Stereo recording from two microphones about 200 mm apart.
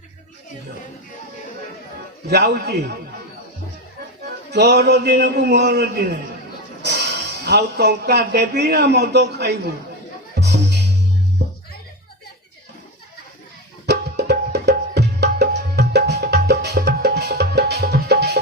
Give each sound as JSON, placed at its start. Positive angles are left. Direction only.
{"t": 2.3, "sound": "a man's voice", "side_deg": -55}
{"t": 4.5, "sound": "speech", "side_deg": -55}
{"t": 10.3, "sound": "music", "side_deg": -55}
{"t": 13.8, "sound": "tabla", "side_deg": -55}